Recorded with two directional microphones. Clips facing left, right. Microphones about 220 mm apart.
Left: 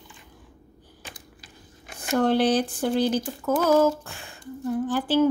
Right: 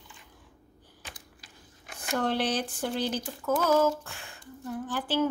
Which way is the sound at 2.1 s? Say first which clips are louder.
Left 8 dB; 40° left (ahead or behind).